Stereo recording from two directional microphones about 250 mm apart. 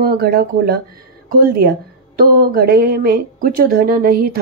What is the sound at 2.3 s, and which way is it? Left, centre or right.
A woman's voice, right.